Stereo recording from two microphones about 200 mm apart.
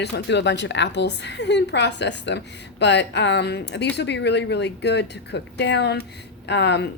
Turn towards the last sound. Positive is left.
turn(degrees=60)  # may be behind; listen again after turning